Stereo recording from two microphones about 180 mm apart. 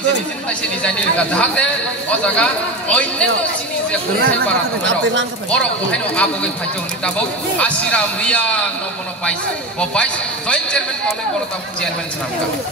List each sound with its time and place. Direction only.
0.5 s a man's voice: 5° left (ahead or behind)
5.5 s a man's voice: 5° left (ahead or behind)